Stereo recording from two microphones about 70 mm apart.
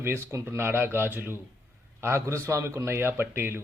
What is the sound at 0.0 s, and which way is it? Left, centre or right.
A man's voice, right.